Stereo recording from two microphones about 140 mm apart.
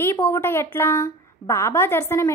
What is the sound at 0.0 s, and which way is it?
A woman's voice, 15° left (ahead or behind).